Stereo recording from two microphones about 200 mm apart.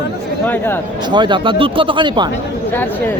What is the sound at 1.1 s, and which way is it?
Speech, 20° right (ahead or behind).